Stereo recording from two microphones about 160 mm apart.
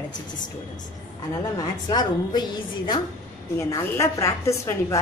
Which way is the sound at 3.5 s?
15° left (ahead or behind).